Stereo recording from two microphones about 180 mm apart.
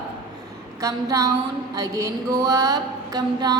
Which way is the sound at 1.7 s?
20° right (ahead or behind).